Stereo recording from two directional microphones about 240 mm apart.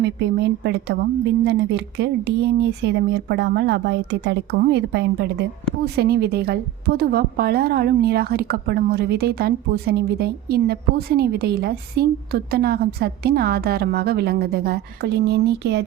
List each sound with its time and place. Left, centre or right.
0.0 s a woman's voice: right